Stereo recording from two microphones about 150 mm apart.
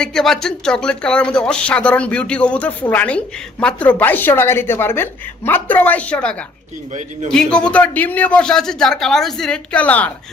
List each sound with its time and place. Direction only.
0.0 s a woman's voice: 5° left (ahead or behind)
7.3 s a woman's voice: 5° left (ahead or behind)